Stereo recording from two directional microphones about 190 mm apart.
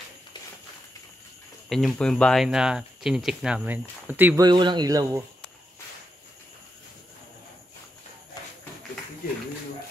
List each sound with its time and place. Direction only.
1.7 s speech: centre (ahead or behind)
4.5 s a man's voice: 25° right (ahead or behind)